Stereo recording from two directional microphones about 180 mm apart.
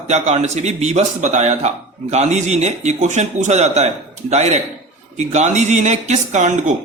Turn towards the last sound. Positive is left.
turn(degrees=-40)  # may be behind; listen again after turning